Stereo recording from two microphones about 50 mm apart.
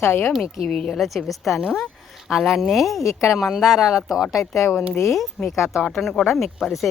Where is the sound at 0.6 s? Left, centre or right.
Centre.